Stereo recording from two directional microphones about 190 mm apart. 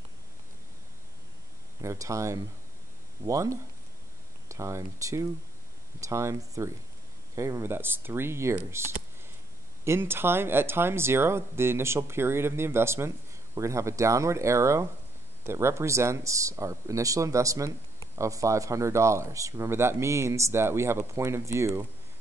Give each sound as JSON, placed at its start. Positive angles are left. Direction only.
{"t": 1.8, "sound": "speech", "side_deg": -15}
{"t": 9.8, "sound": "speech", "side_deg": -10}